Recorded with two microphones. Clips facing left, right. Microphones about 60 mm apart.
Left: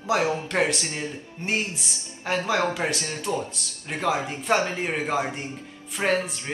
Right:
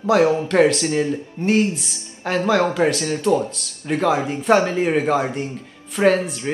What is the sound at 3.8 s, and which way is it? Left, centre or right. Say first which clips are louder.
Speech: right 7 dB; centre.